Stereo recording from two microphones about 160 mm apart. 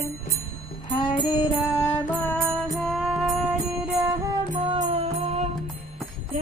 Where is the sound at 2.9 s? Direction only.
5° right (ahead or behind).